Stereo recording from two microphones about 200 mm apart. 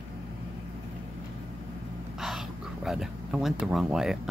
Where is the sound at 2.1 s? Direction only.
Centre (ahead or behind).